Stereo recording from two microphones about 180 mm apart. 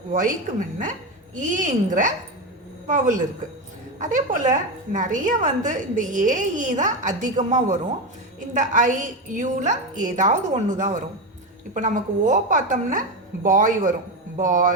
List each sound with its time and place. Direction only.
0.1 s a woman's voice: 50° right (ahead or behind)